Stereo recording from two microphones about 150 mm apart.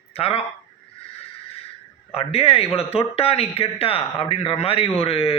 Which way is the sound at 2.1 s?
40° left (ahead or behind).